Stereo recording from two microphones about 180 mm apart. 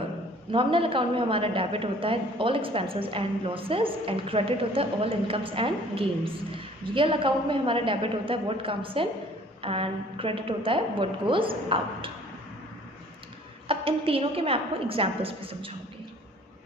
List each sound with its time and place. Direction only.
0.5 s a woman's voice: 30° right (ahead or behind)
13.7 s a woman's voice: 30° right (ahead or behind)